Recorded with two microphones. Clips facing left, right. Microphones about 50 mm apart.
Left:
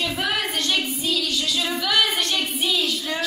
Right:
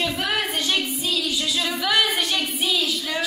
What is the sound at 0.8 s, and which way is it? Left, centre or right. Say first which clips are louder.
Music: left 1 dB; centre.